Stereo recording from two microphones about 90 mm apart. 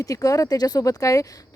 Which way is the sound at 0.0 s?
40° left (ahead or behind).